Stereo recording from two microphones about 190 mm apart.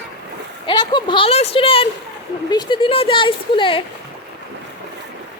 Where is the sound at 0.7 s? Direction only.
25° left (ahead or behind).